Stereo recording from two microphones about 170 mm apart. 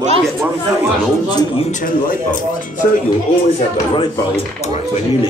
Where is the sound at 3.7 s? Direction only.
25° left (ahead or behind).